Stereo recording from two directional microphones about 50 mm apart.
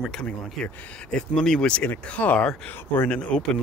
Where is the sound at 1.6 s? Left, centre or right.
Left.